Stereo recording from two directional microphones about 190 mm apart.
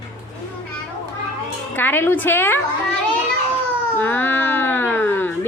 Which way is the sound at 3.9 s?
10° left (ahead or behind).